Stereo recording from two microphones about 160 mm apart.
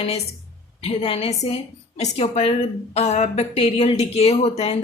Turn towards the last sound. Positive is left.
turn(degrees=40)  # may be behind; listen again after turning